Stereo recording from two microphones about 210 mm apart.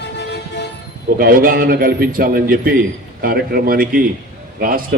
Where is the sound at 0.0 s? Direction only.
55° left (ahead or behind).